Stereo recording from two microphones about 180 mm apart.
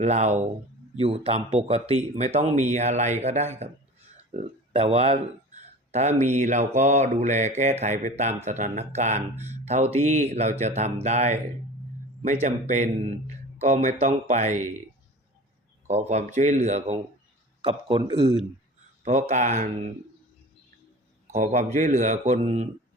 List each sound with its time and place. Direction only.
0.0 s speech: 40° right (ahead or behind)
9.3 s speech: 10° right (ahead or behind)
9.6 s speech: 35° right (ahead or behind)
15.9 s speech: 40° right (ahead or behind)
17.6 s speech: 30° right (ahead or behind)
19.0 s speech: 40° right (ahead or behind)
21.2 s speech: 40° right (ahead or behind)